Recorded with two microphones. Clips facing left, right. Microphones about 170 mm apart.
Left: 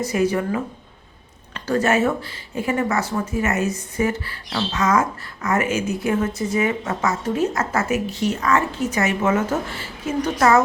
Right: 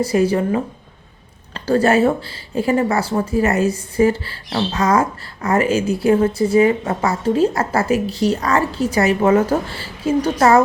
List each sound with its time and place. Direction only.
0.0 s a woman's voice: 30° right (ahead or behind)